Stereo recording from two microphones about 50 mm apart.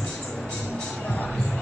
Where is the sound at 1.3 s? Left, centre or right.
Centre.